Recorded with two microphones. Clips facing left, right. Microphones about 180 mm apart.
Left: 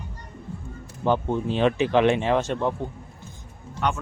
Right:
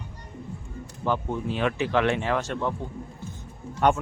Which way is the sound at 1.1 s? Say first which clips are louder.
Left 4 dB; 25° left (ahead or behind).